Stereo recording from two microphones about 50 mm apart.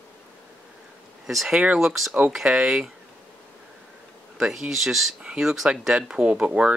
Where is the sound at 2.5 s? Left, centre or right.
Centre.